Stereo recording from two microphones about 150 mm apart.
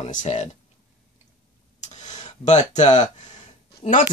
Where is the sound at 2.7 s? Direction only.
50° left (ahead or behind).